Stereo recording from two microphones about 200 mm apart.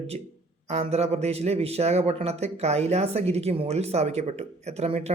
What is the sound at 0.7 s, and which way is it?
A man's voice, 35° right (ahead or behind).